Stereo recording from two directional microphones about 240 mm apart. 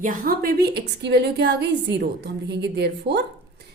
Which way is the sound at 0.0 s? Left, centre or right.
Right.